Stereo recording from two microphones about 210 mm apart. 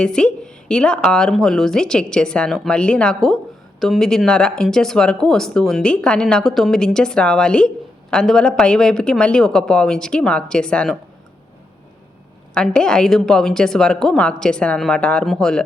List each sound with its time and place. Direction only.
0.0 s speech: 5° left (ahead or behind)
12.5 s speech: 5° left (ahead or behind)